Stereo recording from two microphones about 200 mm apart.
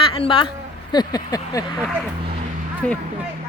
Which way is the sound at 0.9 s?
20° left (ahead or behind).